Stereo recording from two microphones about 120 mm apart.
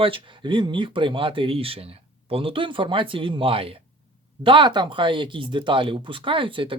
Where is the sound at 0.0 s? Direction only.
45° right (ahead or behind).